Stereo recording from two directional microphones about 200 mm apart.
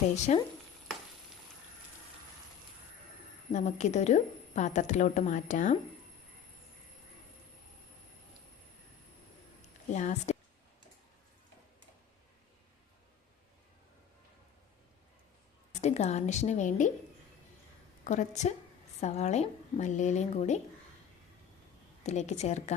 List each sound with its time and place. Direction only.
0.3 s a woman's voice: 35° left (ahead or behind)
3.5 s a woman's voice: 35° left (ahead or behind)
9.9 s a woman's voice: 35° left (ahead or behind)
15.7 s a woman's voice: 35° left (ahead or behind)
18.0 s a woman's voice: 35° left (ahead or behind)
22.0 s a woman's voice: 35° left (ahead or behind)